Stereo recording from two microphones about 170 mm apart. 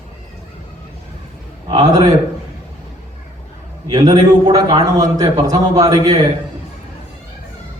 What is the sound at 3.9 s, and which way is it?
A man's voice, 25° right (ahead or behind).